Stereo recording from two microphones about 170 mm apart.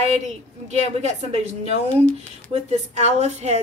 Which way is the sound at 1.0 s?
40° right (ahead or behind).